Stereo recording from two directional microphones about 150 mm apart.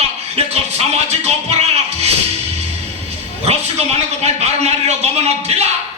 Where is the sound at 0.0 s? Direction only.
45° right (ahead or behind).